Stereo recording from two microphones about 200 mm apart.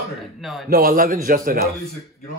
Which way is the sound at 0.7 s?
45° right (ahead or behind).